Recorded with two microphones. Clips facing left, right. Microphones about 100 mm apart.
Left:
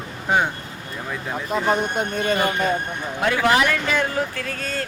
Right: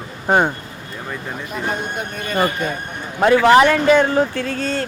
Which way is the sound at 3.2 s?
35° right (ahead or behind).